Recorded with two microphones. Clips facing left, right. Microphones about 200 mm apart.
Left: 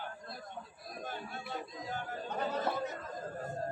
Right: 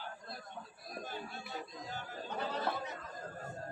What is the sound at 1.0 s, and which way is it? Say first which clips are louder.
Music: left 2 dB; 50° left (ahead or behind).